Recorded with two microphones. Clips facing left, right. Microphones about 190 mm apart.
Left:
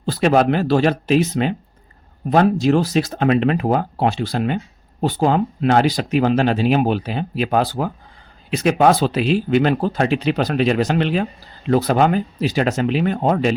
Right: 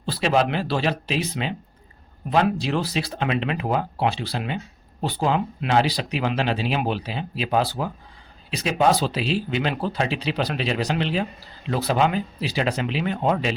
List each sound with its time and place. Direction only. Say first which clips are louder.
0.0 s speech: left 6 dB; 50° left (ahead or behind)